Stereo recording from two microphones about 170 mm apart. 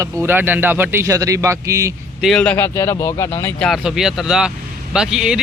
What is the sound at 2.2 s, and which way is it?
Speech, 5° left (ahead or behind).